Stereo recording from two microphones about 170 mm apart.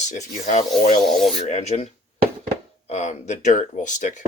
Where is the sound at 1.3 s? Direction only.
40° left (ahead or behind).